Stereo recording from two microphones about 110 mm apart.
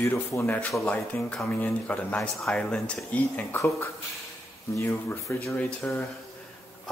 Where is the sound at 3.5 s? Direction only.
25° left (ahead or behind).